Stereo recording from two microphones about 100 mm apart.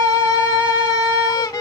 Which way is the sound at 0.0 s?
35° left (ahead or behind).